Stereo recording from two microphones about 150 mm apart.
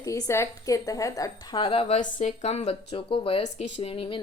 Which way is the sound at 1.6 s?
40° left (ahead or behind).